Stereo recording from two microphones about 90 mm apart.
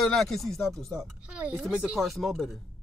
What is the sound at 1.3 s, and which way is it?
Speech, 15° right (ahead or behind).